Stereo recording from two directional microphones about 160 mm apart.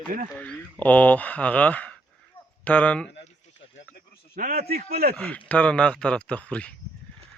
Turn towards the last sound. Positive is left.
turn(degrees=5)  # may be behind; listen again after turning